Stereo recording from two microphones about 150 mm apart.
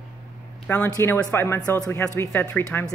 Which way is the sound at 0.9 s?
15° left (ahead or behind).